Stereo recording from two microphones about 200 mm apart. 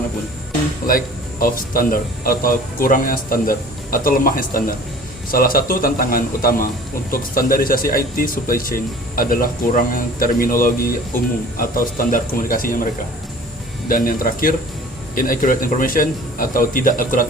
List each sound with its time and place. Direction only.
0.9 s speech: 45° left (ahead or behind)